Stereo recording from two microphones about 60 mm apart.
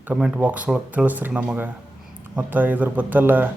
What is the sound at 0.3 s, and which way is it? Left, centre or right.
Speech, right.